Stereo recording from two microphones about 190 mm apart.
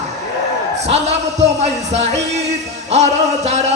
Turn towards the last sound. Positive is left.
turn(degrees=-35)  # may be behind; listen again after turning